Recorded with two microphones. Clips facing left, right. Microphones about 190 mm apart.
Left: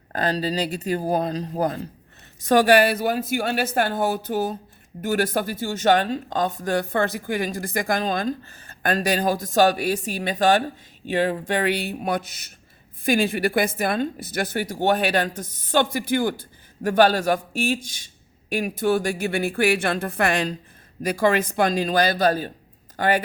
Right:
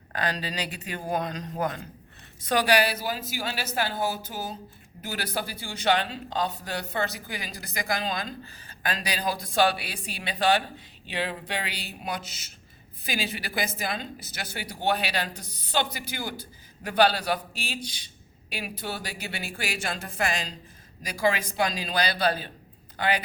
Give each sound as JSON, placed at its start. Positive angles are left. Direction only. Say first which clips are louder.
{"t": 0.1, "sound": "speech", "louder": "left 7 dB", "side_deg": 40}
{"t": 2.4, "sound": "a woman's voice", "louder": "left 7 dB", "side_deg": 45}